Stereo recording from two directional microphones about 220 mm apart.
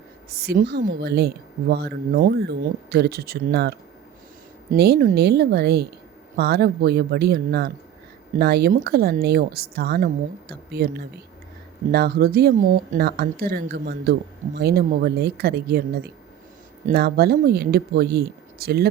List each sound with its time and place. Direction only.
0.3 s speech: 45° right (ahead or behind)